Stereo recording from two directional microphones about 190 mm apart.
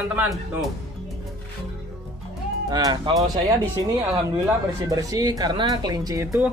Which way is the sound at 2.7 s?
20° right (ahead or behind).